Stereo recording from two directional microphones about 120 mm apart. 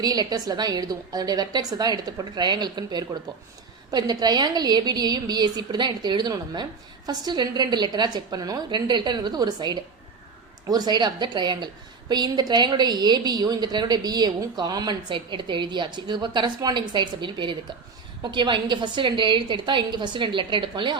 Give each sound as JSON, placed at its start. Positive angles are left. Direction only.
{"t": 0.0, "sound": "a woman's voice", "side_deg": -35}